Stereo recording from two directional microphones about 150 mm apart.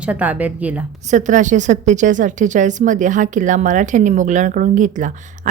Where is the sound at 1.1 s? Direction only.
55° right (ahead or behind).